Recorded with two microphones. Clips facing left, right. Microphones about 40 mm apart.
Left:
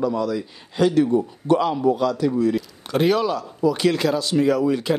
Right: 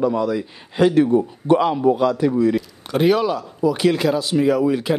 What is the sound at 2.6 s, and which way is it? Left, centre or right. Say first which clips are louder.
Speech: right 2 dB; centre.